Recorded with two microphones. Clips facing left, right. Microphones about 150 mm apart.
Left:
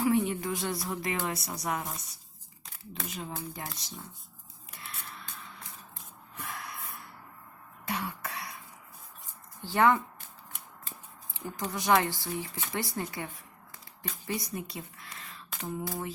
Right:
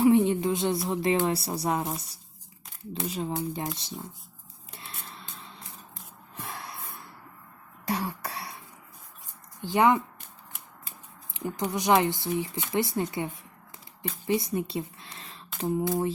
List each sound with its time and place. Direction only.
0.0 s speech: 20° right (ahead or behind)
4.7 s a sound: 30° right (ahead or behind)
6.3 s snort: 30° right (ahead or behind)
7.9 s throat clearing: 35° right (ahead or behind)
9.6 s speech: 15° right (ahead or behind)
11.3 s speech: 20° right (ahead or behind)